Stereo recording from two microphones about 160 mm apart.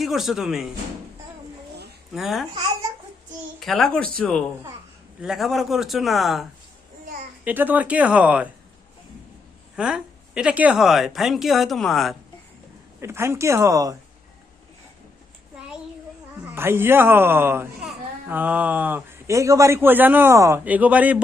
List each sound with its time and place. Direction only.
0.0 s speech: centre (ahead or behind)
2.1 s speech: centre (ahead or behind)
3.6 s speech: centre (ahead or behind)
7.4 s a man's voice: 10° right (ahead or behind)
9.7 s speech: 5° right (ahead or behind)
13.0 s a man's voice: 15° right (ahead or behind)
16.6 s a man's voice: 15° right (ahead or behind)